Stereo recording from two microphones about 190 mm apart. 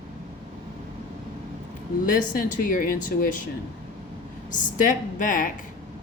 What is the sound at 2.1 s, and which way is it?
A woman's voice, 45° left (ahead or behind).